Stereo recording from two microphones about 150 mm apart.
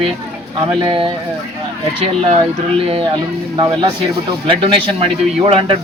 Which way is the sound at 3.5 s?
25° right (ahead or behind).